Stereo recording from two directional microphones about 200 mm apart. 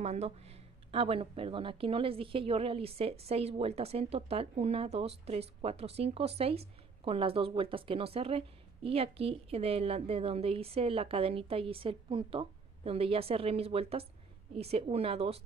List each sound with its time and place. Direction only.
0.0 s speech: 35° right (ahead or behind)